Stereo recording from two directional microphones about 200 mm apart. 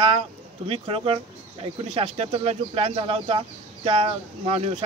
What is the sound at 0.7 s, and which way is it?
Speech, 30° right (ahead or behind).